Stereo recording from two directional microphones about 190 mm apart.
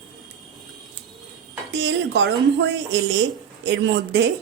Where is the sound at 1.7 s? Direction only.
70° right (ahead or behind).